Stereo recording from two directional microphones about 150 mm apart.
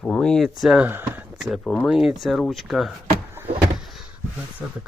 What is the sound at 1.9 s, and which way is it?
Speech, centre (ahead or behind).